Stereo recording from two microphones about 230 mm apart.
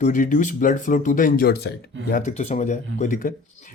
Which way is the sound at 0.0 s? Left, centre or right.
Left.